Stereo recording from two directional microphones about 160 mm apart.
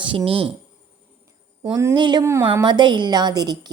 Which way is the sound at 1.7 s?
25° right (ahead or behind).